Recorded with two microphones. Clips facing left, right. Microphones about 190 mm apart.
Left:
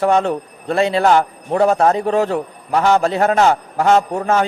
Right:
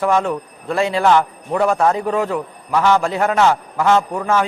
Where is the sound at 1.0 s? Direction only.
40° left (ahead or behind).